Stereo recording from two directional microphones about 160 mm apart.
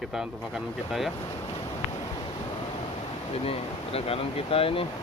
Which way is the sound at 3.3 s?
40° left (ahead or behind).